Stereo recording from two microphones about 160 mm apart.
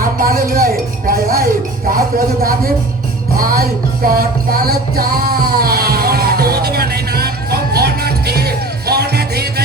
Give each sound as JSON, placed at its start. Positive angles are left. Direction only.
{"t": 0.2, "sound": "a sound", "side_deg": -60}
{"t": 1.9, "sound": "speech", "side_deg": -60}
{"t": 3.3, "sound": "music", "side_deg": -65}